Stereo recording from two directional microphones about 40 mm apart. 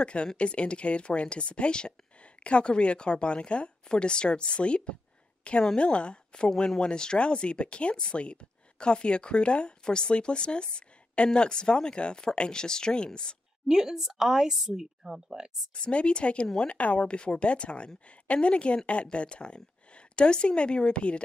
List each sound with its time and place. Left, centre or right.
0.0 s a woman's voice: left
13.7 s speech: centre
15.7 s speech: left